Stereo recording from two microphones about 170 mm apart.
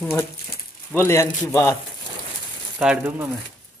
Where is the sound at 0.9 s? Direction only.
15° left (ahead or behind).